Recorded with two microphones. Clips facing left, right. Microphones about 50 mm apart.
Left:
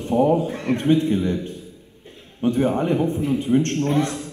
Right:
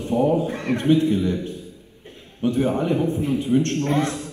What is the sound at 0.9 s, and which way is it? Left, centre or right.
Speech, left.